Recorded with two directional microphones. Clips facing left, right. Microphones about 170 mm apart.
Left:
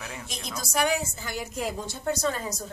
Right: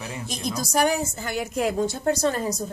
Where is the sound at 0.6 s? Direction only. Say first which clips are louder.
Right 3 dB; 40° right (ahead or behind).